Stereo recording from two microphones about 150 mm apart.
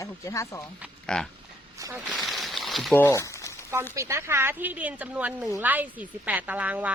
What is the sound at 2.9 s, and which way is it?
Speech, 15° left (ahead or behind).